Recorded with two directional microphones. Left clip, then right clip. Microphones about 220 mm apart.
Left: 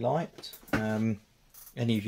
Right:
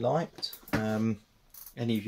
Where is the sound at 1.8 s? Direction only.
35° left (ahead or behind).